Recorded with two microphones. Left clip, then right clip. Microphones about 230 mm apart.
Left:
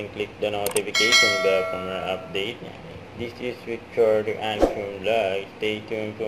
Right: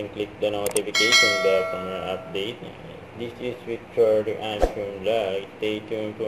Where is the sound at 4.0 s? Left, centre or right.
Centre.